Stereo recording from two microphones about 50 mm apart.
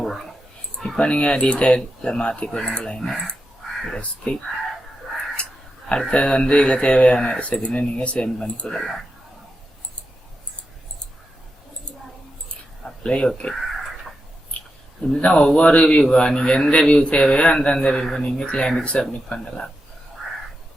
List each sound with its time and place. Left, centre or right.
0.0 s dog: centre
0.9 s speech: left
5.9 s speech: centre
8.6 s speech: centre
12.8 s speech: centre
13.5 s a sound: centre
15.2 s speech: centre